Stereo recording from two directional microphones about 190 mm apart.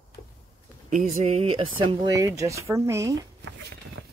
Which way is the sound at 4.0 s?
75° right (ahead or behind).